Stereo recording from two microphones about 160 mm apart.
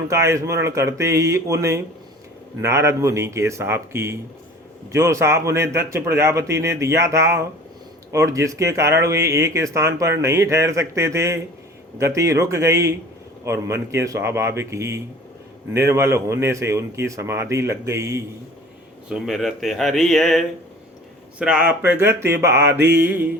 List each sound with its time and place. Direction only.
0.1 s speech: 20° right (ahead or behind)
19.0 s speech: centre (ahead or behind)